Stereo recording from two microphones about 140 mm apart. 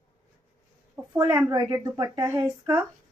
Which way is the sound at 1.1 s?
20° right (ahead or behind).